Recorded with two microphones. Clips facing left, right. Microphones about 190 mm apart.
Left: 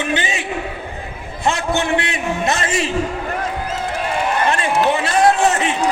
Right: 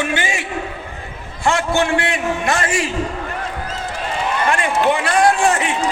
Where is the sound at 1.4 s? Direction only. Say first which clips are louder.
Right 2 dB; 20° left (ahead or behind).